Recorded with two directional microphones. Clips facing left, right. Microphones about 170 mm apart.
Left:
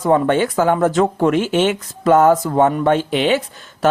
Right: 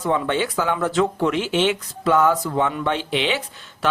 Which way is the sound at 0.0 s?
45° left (ahead or behind).